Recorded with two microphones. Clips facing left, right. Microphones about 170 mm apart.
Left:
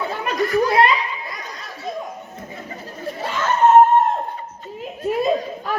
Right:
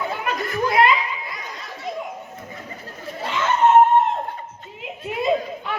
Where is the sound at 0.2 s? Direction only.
35° left (ahead or behind).